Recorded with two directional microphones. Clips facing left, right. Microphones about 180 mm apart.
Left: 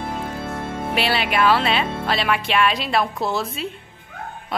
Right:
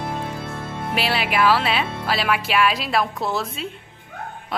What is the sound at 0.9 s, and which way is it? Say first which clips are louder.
Speech: left 1 dB; centre (ahead or behind).